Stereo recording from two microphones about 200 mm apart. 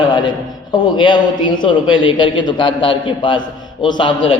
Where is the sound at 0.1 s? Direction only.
25° left (ahead or behind).